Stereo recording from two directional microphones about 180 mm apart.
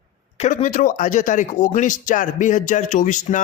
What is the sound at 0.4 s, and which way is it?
Speech, 45° left (ahead or behind).